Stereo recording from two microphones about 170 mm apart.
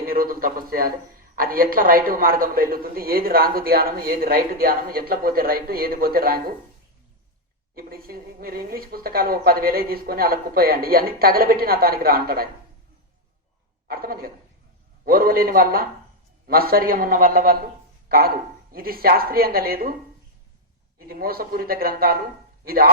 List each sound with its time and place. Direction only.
0.0 s a woman's voice: 60° right (ahead or behind)
7.8 s a woman's voice: 60° right (ahead or behind)
13.8 s a woman's voice: 60° right (ahead or behind)
21.1 s a woman's voice: 60° right (ahead or behind)